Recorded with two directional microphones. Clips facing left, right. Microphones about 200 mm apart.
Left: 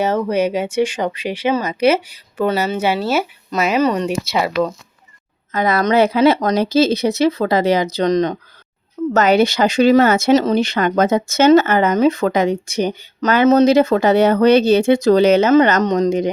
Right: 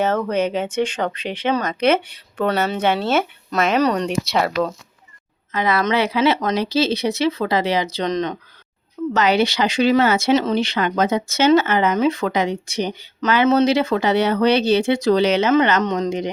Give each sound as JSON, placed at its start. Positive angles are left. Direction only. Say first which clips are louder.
{"t": 0.0, "sound": "speech", "louder": "left 2 dB", "side_deg": 10}
{"t": 5.5, "sound": "speech", "louder": "left 3 dB", "side_deg": 40}